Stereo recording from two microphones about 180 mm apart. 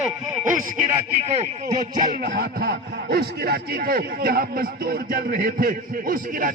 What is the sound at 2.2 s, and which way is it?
A man's voice, 55° right (ahead or behind).